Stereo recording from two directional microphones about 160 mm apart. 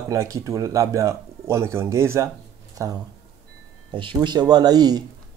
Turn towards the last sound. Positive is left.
turn(degrees=-25)  # may be behind; listen again after turning